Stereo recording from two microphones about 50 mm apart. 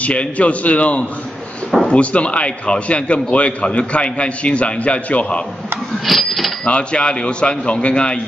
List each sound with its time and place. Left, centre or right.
0.0 s a man's voice: left
6.0 s speech: centre
6.6 s a man's voice: left